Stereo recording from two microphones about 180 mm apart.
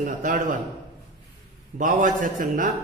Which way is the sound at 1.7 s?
50° right (ahead or behind).